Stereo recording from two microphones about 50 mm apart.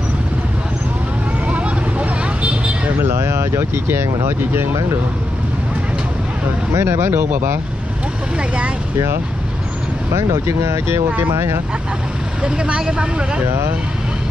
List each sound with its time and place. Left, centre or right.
1.5 s vehicle: right
3.0 s a sound: right
3.8 s speech: right
6.7 s speech: right
10.1 s speech: right
12.4 s speech: centre